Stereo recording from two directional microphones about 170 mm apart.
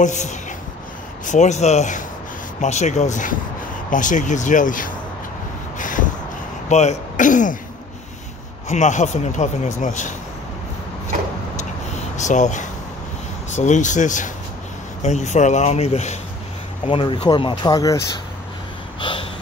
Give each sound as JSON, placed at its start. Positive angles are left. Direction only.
{"t": 0.0, "sound": "a man's voice", "side_deg": 45}
{"t": 5.8, "sound": "a sound", "side_deg": 50}
{"t": 6.7, "sound": "speech", "side_deg": 40}
{"t": 8.6, "sound": "a man's voice", "side_deg": 45}
{"t": 12.2, "sound": "a man's voice", "side_deg": 45}
{"t": 16.8, "sound": "speech", "side_deg": 30}
{"t": 18.9, "sound": "snort", "side_deg": 30}